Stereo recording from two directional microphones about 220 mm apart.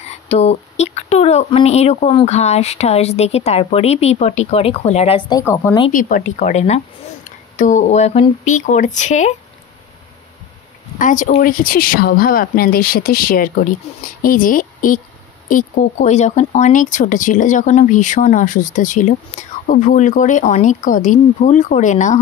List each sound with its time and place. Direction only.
0.0 s speech: 30° left (ahead or behind)
5.4 s a woman's voice: 10° left (ahead or behind)
5.9 s speech: 35° left (ahead or behind)
11.0 s speech: 35° left (ahead or behind)